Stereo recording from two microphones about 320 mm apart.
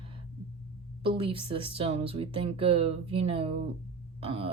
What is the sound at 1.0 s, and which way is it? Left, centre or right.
A woman's voice, centre.